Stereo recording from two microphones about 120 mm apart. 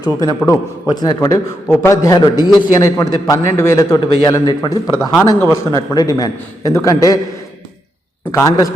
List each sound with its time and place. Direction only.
0.0 s a man's voice: 35° left (ahead or behind)
5.4 s a man's voice: 20° left (ahead or behind)
8.3 s a man's voice: 30° left (ahead or behind)